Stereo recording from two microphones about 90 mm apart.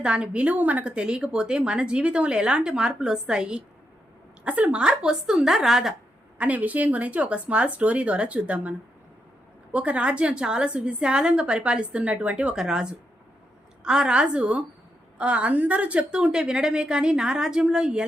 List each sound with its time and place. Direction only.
0.0 s a woman's voice: 15° right (ahead or behind)
6.4 s a woman's voice: 15° right (ahead or behind)
9.7 s a woman's voice: 15° right (ahead or behind)